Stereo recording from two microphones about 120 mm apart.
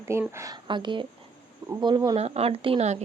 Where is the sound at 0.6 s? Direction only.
40° right (ahead or behind).